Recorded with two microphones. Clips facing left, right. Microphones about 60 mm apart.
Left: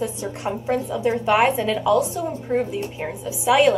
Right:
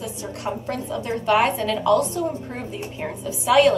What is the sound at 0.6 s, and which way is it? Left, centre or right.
A woman's voice, centre.